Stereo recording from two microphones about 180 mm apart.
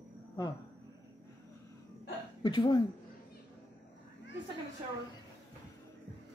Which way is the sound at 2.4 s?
25° left (ahead or behind).